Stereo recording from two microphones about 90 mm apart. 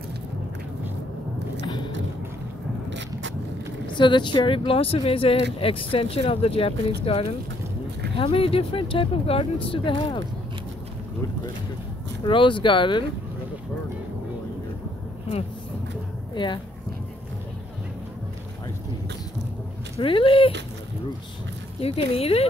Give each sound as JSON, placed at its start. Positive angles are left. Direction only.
{"t": 3.9, "sound": "speech", "side_deg": 60}
{"t": 12.3, "sound": "speech", "side_deg": 65}
{"t": 20.0, "sound": "speech", "side_deg": 75}
{"t": 21.7, "sound": "speech", "side_deg": 90}